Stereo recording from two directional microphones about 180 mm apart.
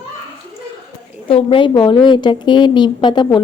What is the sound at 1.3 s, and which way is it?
A woman's voice, 30° left (ahead or behind).